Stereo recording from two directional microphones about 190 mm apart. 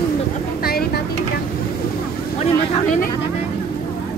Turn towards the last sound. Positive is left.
turn(degrees=40)  # may be behind; listen again after turning